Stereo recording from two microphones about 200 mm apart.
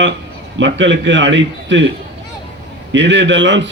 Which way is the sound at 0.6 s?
65° right (ahead or behind).